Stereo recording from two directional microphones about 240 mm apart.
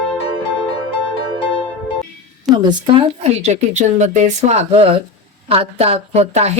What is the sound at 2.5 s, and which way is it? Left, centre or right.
Speech, centre.